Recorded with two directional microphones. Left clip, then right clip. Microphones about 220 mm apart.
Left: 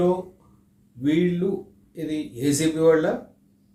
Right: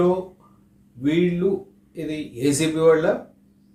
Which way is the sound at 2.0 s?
5° right (ahead or behind).